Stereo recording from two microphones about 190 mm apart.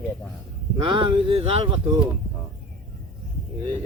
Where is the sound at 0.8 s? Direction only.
25° right (ahead or behind).